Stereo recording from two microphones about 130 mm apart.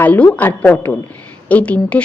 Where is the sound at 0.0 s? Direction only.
15° left (ahead or behind).